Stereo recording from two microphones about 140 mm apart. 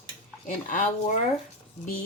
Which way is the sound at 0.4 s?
65° left (ahead or behind).